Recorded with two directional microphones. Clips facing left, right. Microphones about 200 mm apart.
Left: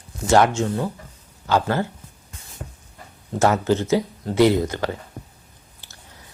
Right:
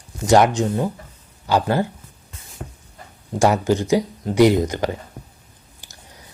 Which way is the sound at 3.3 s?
15° right (ahead or behind).